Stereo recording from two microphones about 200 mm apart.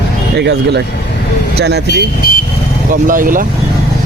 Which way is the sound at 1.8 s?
55° left (ahead or behind).